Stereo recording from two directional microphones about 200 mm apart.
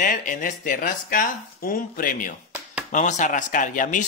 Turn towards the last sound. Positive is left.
turn(degrees=40)  # may be behind; listen again after turning